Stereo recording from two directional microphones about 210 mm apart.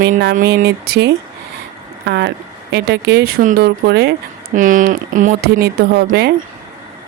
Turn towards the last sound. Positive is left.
turn(degrees=-50)  # may be behind; listen again after turning